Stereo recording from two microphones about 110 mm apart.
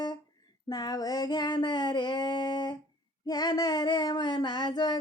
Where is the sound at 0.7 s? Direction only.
40° left (ahead or behind).